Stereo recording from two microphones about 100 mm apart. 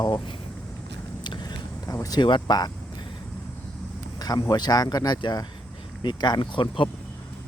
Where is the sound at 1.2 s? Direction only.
45° left (ahead or behind).